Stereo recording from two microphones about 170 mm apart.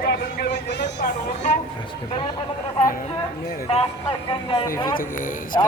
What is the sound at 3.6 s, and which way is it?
Speech, 35° left (ahead or behind).